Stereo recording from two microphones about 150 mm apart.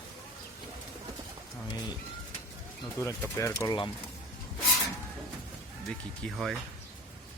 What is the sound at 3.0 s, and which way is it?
Speech, 20° left (ahead or behind).